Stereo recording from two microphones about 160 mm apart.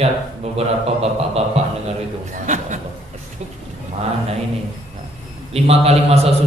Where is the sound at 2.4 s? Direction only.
50° right (ahead or behind).